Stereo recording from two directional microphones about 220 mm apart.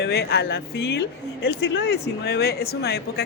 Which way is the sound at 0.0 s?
50° left (ahead or behind).